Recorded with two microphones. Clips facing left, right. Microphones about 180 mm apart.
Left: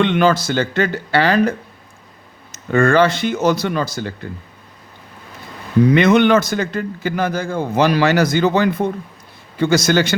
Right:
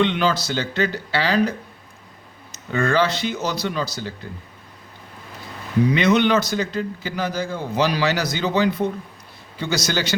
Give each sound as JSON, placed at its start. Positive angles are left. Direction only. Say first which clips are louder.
{"t": 0.0, "sound": "a man's voice", "louder": "left 5 dB", "side_deg": 55}
{"t": 2.7, "sound": "a man's voice", "louder": "left 6 dB", "side_deg": 50}
{"t": 5.9, "sound": "a man's voice", "louder": "left 5 dB", "side_deg": 50}